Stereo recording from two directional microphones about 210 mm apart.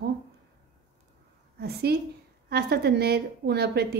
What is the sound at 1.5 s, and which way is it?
A woman's voice, 50° right (ahead or behind).